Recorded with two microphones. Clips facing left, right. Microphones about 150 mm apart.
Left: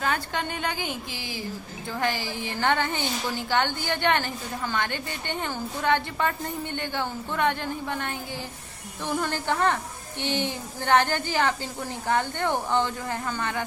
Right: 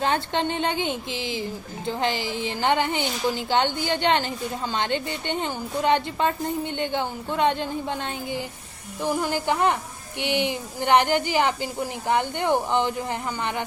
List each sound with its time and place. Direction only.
0.0 s a woman's voice: 25° right (ahead or behind)